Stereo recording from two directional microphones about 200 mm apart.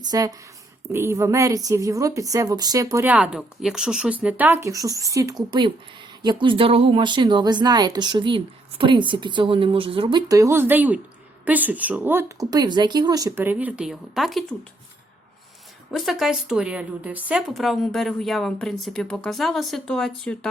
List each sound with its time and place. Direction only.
0.0 s a woman's voice: 20° right (ahead or behind); by 14.4 s centre (ahead or behind)
15.9 s speech: centre (ahead or behind)